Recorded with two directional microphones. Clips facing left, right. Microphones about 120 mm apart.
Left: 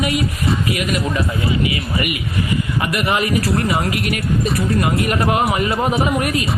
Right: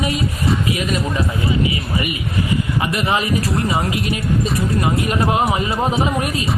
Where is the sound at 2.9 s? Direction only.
25° right (ahead or behind).